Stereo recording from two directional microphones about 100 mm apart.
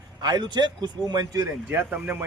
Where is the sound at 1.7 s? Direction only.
20° right (ahead or behind).